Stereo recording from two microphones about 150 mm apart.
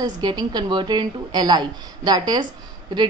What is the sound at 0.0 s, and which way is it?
A woman's voice, 25° right (ahead or behind).